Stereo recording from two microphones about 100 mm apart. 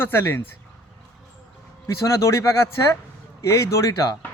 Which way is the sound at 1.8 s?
30° left (ahead or behind).